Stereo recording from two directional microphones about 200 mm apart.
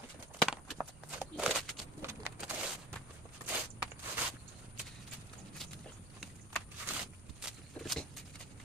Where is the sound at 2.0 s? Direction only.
10° right (ahead or behind).